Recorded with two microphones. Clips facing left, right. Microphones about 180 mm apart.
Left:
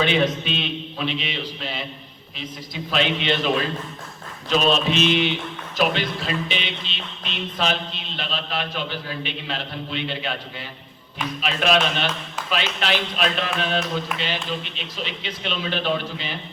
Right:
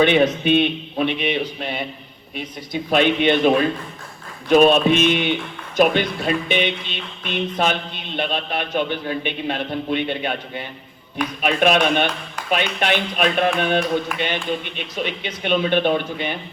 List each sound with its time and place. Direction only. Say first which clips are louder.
0.0 s speech: right 5 dB; 55° right (ahead or behind)
2.9 s a man's voice: right 6 dB; 55° right (ahead or behind)